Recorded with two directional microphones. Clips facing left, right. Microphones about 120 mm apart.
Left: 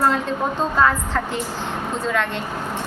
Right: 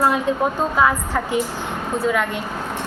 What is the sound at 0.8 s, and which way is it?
Speech, 10° right (ahead or behind).